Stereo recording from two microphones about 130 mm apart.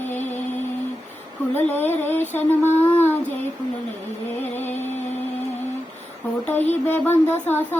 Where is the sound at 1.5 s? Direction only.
15° left (ahead or behind).